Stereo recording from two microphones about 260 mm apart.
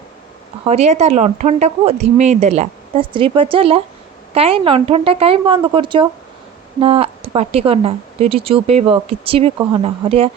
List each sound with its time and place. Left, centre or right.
0.6 s speech: right